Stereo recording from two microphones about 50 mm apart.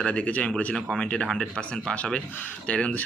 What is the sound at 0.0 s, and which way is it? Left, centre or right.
Speech, left.